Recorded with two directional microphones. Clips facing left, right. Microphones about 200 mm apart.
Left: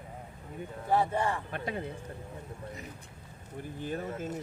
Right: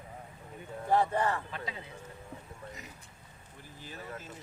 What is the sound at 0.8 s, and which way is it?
Speech, 10° left (ahead or behind).